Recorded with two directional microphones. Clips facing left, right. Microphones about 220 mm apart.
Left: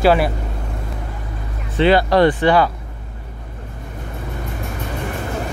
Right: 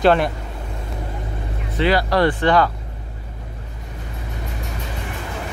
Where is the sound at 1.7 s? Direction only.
25° left (ahead or behind).